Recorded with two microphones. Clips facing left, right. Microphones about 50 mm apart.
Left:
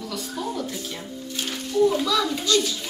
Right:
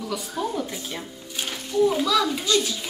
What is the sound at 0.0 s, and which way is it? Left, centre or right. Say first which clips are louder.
Speech: right 2 dB; centre.